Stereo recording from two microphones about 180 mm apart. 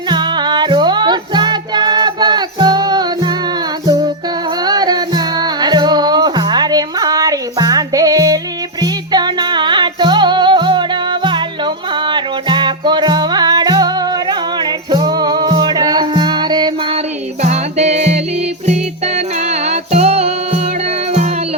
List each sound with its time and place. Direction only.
0.1 s music: 25° right (ahead or behind)
17.4 s music: 40° right (ahead or behind)